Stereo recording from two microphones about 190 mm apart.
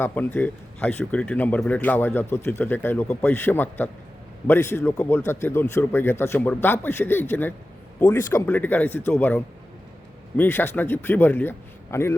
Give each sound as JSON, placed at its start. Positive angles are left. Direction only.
{"t": 0.0, "sound": "speech", "side_deg": 10}